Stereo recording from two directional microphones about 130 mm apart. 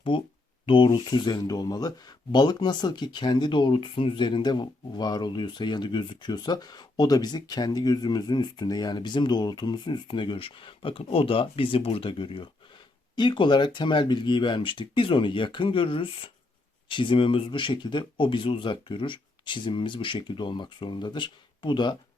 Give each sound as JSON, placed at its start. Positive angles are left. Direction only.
{"t": 0.1, "sound": "speech", "side_deg": 40}